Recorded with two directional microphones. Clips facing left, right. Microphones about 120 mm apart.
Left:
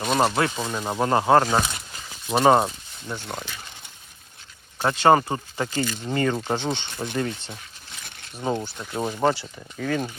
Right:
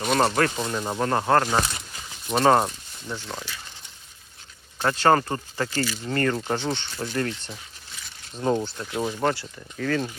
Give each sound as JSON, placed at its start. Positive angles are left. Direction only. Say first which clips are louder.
{"t": 0.0, "sound": "speech", "louder": "even", "side_deg": 0}
{"t": 0.3, "sound": "speech", "louder": "right 1 dB", "side_deg": 10}
{"t": 4.8, "sound": "speech", "louder": "left 2 dB", "side_deg": 15}